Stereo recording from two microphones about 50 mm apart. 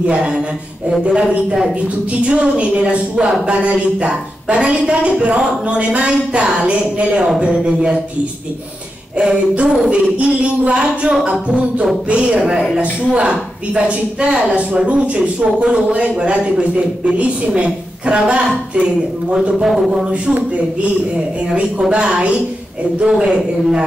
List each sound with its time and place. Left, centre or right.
0.0 s a woman's voice: right
9.2 s a woman's voice: centre
13.1 s a woman's voice: right
21.9 s a woman's voice: right